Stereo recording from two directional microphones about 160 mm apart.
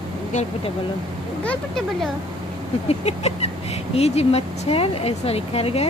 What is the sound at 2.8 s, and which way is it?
Speech, 40° left (ahead or behind).